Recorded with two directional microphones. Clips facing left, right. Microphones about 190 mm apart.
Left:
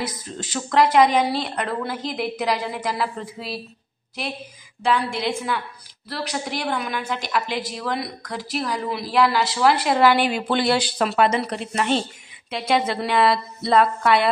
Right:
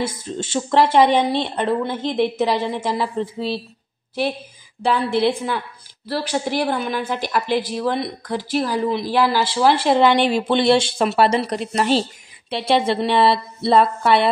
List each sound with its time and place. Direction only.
0.0 s a woman's voice: 25° right (ahead or behind)
4.8 s a woman's voice: 35° right (ahead or behind)